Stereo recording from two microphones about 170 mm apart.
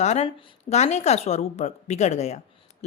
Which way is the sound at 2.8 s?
40° left (ahead or behind).